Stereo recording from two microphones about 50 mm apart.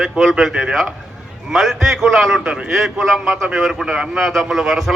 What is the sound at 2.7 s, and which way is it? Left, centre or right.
A man's voice, centre.